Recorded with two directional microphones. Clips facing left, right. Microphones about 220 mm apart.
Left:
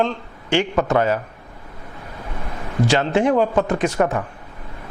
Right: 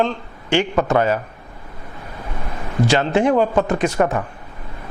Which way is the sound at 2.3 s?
25° right (ahead or behind).